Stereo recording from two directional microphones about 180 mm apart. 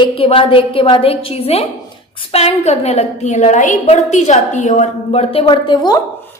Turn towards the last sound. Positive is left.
turn(degrees=20)  # may be behind; listen again after turning